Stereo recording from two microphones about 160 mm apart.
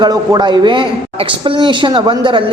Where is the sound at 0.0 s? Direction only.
25° right (ahead or behind).